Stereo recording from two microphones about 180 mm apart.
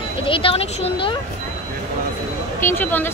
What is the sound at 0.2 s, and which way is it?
Speech, 30° left (ahead or behind).